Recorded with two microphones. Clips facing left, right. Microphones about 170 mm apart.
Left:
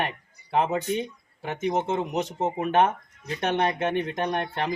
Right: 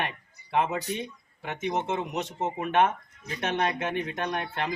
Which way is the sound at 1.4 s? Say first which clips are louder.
Left 3 dB; 35° left (ahead or behind).